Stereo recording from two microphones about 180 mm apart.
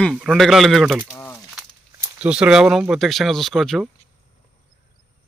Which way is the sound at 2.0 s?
5° right (ahead or behind).